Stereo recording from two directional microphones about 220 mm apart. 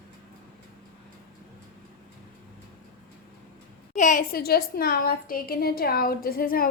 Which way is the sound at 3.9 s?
35° left (ahead or behind).